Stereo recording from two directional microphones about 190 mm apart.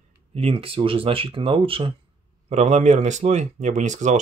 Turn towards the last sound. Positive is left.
turn(degrees=-40)  # may be behind; listen again after turning